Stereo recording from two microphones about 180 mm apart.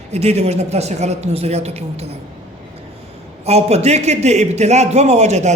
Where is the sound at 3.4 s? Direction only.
35° right (ahead or behind).